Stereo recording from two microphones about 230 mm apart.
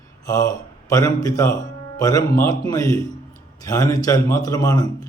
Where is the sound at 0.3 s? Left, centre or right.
Centre.